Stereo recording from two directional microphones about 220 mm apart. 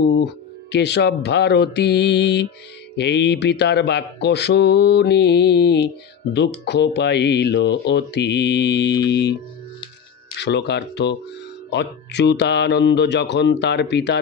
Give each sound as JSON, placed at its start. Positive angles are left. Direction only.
{"t": 0.0, "sound": "mantra", "side_deg": 50}
{"t": 10.4, "sound": "mantra", "side_deg": 50}